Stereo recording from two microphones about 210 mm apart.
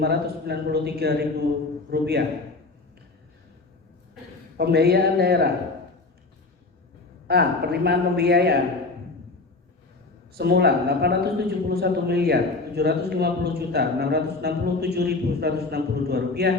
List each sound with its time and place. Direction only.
0.0 s a man's voice: 50° right (ahead or behind)
4.5 s a man's voice: 50° right (ahead or behind)
7.3 s a man's voice: 50° right (ahead or behind)
10.3 s a man's voice: 50° right (ahead or behind)